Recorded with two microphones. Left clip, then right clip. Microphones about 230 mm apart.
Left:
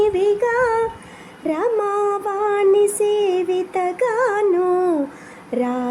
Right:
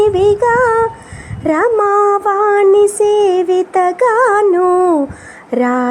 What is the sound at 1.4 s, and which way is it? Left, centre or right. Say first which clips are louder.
Child singing: right 8 dB; centre.